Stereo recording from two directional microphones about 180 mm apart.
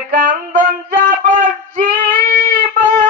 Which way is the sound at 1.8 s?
45° right (ahead or behind).